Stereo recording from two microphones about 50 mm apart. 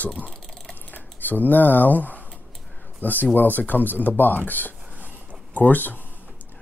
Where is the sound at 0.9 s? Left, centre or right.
Left.